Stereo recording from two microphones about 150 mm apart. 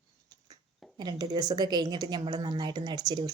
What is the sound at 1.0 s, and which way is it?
Speech, 30° right (ahead or behind).